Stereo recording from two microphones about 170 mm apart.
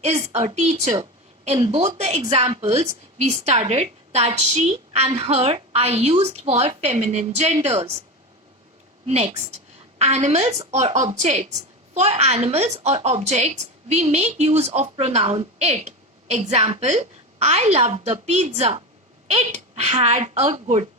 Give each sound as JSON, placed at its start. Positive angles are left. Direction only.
{"t": 0.0, "sound": "a woman's voice", "side_deg": -40}
{"t": 9.0, "sound": "a woman's voice", "side_deg": -40}